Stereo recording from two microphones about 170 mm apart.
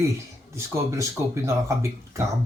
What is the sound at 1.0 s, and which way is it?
Speech, 15° right (ahead or behind).